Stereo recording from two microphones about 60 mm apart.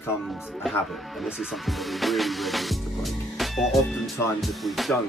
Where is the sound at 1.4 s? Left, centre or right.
Centre.